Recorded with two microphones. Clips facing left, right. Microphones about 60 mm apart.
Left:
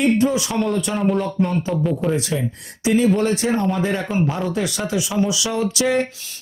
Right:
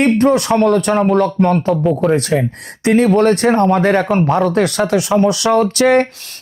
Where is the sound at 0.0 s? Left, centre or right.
Right.